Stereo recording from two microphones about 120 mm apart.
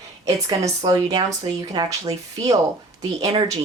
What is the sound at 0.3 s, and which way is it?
Speech, 30° right (ahead or behind).